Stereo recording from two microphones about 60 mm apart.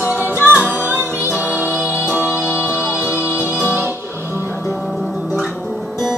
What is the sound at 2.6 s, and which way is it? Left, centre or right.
Music, left.